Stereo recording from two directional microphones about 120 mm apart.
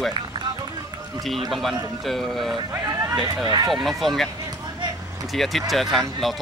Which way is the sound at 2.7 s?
25° right (ahead or behind).